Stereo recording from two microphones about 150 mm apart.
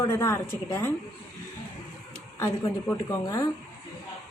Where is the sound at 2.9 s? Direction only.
20° left (ahead or behind).